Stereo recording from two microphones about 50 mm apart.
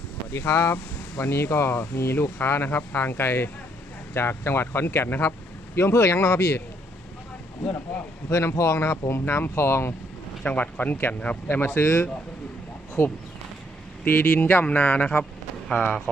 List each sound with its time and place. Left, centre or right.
0.3 s speech: left
5.0 s speech: left
5.7 s speech: left
8.3 s speech: left
10.4 s speech: left
11.4 s speech: left
13.0 s speech: left
15.7 s speech: left